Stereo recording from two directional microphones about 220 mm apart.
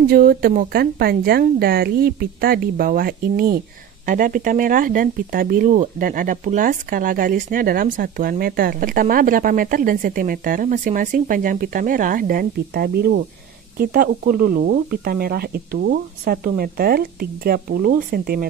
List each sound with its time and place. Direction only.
0.0 s a woman's voice: 40° right (ahead or behind)